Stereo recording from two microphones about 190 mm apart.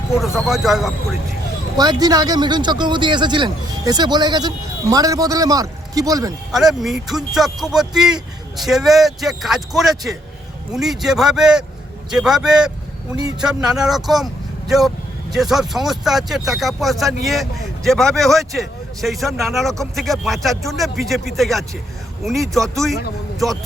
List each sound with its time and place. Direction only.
0.1 s speech: centre (ahead or behind)
1.7 s speech: 20° right (ahead or behind)
6.5 s speech: centre (ahead or behind)